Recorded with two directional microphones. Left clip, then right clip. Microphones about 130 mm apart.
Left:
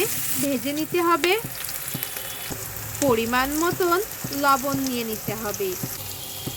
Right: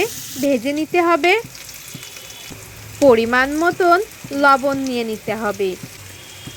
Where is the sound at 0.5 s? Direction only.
35° right (ahead or behind).